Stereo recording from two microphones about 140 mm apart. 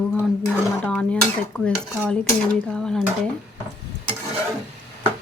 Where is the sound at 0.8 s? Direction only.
5° left (ahead or behind).